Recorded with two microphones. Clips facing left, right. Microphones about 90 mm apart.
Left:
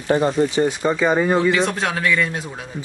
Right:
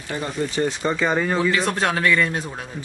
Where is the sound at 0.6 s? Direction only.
5° left (ahead or behind).